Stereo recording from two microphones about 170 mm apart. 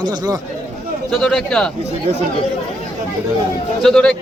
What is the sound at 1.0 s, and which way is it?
Speech, 5° left (ahead or behind).